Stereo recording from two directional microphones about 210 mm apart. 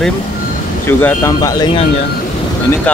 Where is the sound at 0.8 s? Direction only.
10° left (ahead or behind).